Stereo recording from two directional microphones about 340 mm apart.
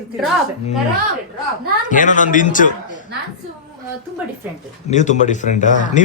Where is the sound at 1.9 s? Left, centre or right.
Left.